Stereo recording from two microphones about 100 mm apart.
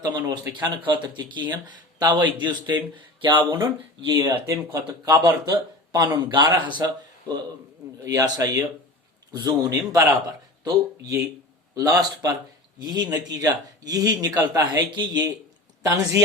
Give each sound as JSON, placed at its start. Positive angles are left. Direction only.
{"t": 0.0, "sound": "speech", "side_deg": -40}
{"t": 4.3, "sound": "speech", "side_deg": -30}
{"t": 5.2, "sound": "speech", "side_deg": -40}
{"t": 8.0, "sound": "speech", "side_deg": -35}
{"t": 15.8, "sound": "speech", "side_deg": -35}